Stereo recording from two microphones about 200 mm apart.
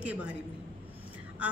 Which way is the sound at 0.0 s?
5° right (ahead or behind).